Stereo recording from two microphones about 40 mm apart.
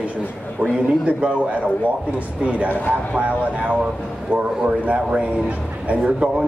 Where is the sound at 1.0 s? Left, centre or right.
Right.